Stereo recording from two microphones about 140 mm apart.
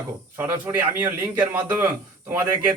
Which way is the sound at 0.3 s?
15° right (ahead or behind).